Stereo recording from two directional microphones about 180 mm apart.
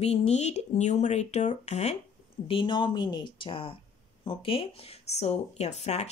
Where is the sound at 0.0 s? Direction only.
35° left (ahead or behind).